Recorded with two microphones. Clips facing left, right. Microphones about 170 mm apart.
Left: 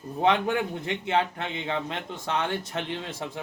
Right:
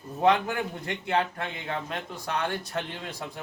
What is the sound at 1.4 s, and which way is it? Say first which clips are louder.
A man's voice: left 3 dB; 25° left (ahead or behind).